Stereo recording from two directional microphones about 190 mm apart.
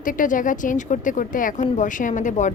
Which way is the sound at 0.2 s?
45° left (ahead or behind).